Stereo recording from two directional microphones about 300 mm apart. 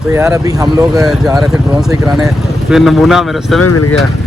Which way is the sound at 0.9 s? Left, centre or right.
Centre.